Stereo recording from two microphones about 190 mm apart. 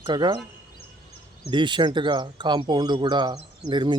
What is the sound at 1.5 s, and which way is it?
Speech, 25° right (ahead or behind).